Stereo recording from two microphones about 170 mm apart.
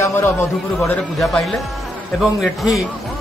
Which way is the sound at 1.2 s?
Centre (ahead or behind).